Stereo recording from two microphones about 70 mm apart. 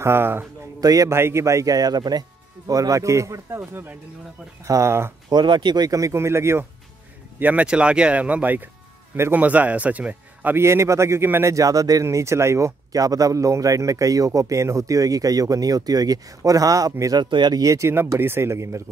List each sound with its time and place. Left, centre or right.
0.0 s speech: right
0.7 s a man's voice: right
1.1 s speech: right
4.6 s speech: right
5.3 s speech: right
5.9 s speech: right
7.3 s speech: right
10.5 s speech: right
11.5 s speech: right
17.0 s speech: right
17.6 s speech: right